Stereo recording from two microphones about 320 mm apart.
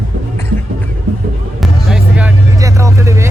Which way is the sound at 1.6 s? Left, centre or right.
Centre.